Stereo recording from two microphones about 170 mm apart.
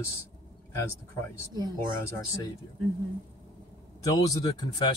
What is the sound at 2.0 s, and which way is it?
Speech, 15° left (ahead or behind).